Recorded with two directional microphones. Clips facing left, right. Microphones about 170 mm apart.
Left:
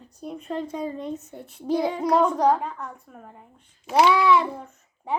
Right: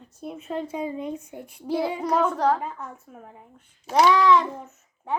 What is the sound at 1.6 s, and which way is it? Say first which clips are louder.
A child's voice: left 2 dB; 15° left (ahead or behind).